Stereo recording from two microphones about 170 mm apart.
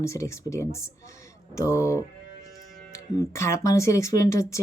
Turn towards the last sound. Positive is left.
turn(degrees=15)  # may be behind; listen again after turning